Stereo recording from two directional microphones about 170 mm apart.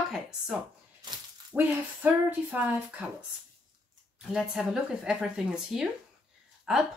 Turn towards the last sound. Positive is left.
turn(degrees=-5)  # may be behind; listen again after turning